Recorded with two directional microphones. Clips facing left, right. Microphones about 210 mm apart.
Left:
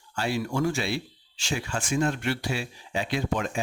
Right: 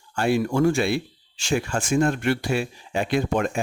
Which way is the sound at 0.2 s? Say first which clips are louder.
Right 6 dB; 55° right (ahead or behind).